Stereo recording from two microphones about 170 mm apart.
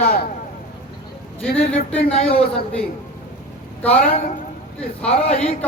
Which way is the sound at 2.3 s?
35° left (ahead or behind).